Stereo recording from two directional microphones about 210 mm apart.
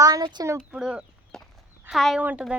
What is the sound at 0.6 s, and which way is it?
Chicken, 5° right (ahead or behind).